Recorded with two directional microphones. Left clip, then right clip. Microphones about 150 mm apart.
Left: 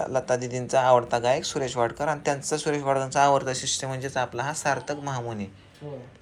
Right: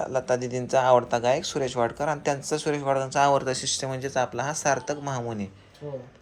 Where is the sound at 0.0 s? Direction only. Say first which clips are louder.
Even; 30° right (ahead or behind).